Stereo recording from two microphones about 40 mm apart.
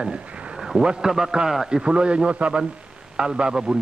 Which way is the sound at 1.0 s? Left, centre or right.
Centre.